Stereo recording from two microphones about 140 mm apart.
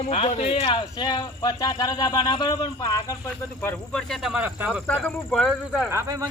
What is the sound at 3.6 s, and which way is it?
Speech, 15° left (ahead or behind).